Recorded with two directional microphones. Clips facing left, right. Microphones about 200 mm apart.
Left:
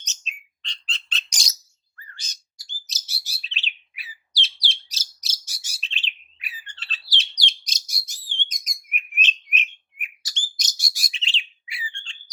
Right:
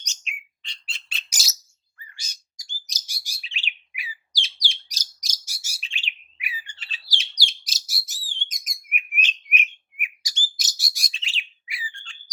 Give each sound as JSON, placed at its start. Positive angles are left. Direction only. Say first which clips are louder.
{"t": 0.1, "sound": "bird", "louder": "right 2 dB", "side_deg": -10}
{"t": 11.1, "sound": "bird", "louder": "left 3 dB", "side_deg": 25}